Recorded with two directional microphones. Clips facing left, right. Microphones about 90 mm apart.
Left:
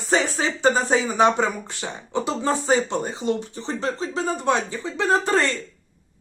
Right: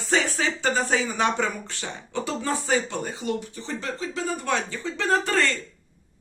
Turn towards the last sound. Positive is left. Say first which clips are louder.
# left 2 dB
turn(degrees=20)  # may be behind; listen again after turning